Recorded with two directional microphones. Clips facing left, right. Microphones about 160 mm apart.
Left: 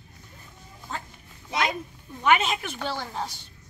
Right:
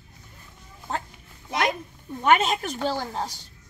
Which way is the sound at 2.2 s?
40° right (ahead or behind).